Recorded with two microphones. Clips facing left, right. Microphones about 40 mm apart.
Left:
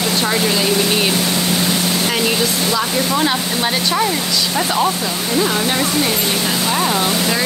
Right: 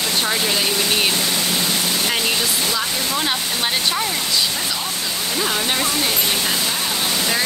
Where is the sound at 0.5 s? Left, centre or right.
Centre.